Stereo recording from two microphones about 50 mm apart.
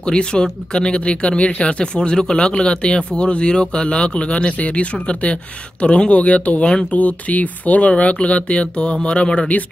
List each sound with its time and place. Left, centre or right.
0.0 s speech: centre